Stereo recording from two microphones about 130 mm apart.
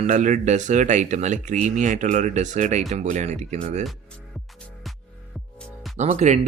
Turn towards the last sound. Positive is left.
turn(degrees=-65)  # may be behind; listen again after turning